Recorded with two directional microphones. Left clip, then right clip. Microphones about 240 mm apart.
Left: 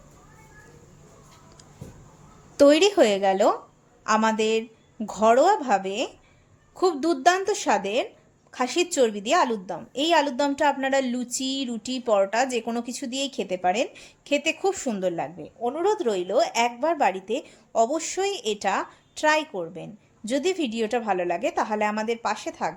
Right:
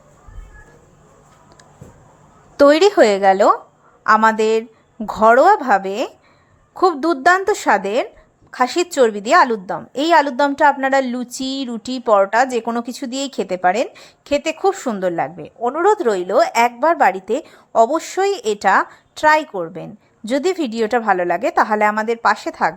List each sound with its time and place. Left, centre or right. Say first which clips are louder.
2.6 s a woman's voice: right 6 dB; centre